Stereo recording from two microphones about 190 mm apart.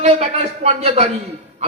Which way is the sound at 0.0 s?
35° right (ahead or behind).